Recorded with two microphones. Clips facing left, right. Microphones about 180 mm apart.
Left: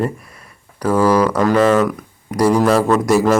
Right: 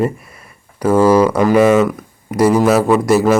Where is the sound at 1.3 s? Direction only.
10° right (ahead or behind).